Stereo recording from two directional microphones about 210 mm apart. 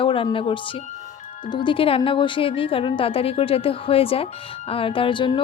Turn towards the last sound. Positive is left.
turn(degrees=25)  # may be behind; listen again after turning